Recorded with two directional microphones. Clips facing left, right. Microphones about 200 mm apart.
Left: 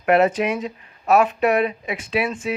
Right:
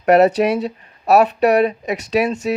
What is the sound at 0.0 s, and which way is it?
Speech, 40° right (ahead or behind).